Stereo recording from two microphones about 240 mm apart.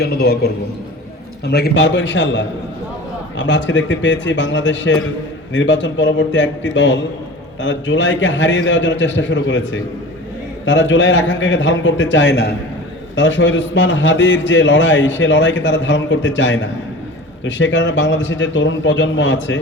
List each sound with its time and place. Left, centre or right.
0.0 s a man's voice: left